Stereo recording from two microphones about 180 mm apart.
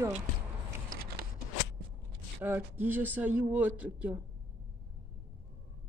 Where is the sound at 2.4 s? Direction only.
10° right (ahead or behind).